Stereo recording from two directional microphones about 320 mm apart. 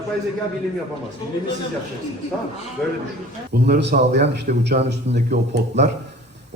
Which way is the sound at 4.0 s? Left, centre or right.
Right.